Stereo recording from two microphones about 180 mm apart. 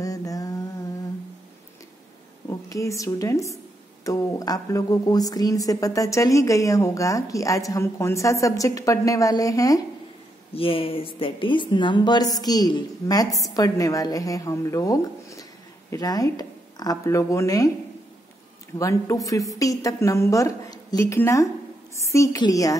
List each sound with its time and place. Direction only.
0.0 s mantra: 20° left (ahead or behind)
2.7 s a woman's voice: 20° left (ahead or behind)
10.5 s a woman's voice: 30° left (ahead or behind)
18.8 s a woman's voice: 15° left (ahead or behind)